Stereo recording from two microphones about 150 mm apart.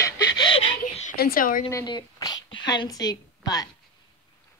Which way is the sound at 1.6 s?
25° left (ahead or behind).